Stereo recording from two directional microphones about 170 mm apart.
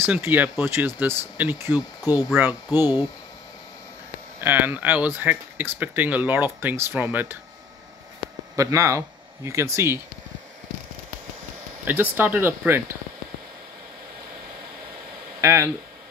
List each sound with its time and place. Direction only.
0.0 s speech: 10° right (ahead or behind)
4.4 s speech: 10° right (ahead or behind)
8.5 s speech: 20° right (ahead or behind)
11.8 s speech: 10° right (ahead or behind)
15.4 s speech: 15° right (ahead or behind)